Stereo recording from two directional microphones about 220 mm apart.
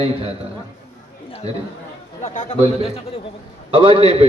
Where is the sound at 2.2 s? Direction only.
35° left (ahead or behind).